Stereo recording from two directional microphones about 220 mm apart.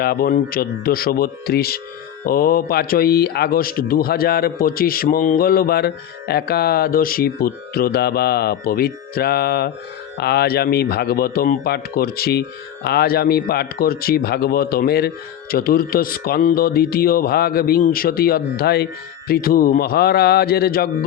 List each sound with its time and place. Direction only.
0.0 s speech: 45° left (ahead or behind)